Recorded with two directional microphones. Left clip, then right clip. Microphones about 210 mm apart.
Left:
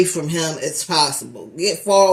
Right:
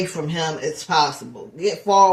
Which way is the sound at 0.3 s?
15° left (ahead or behind).